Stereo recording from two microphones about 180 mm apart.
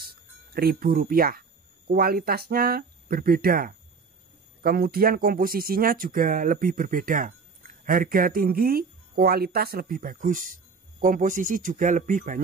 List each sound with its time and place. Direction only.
0.0 s speech: 60° right (ahead or behind)